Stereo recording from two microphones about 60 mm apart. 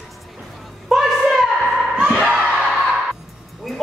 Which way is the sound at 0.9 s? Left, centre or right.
Centre.